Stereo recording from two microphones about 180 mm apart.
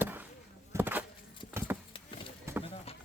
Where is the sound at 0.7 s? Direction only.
10° right (ahead or behind).